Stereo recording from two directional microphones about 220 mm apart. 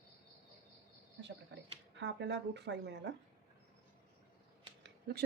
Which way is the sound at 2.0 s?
55° right (ahead or behind).